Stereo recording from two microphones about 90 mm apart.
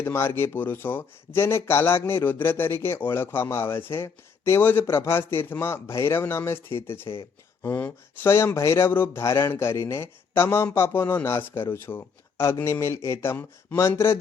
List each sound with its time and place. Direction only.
0.0 s speech: 25° left (ahead or behind)
8.3 s speech: 30° left (ahead or behind)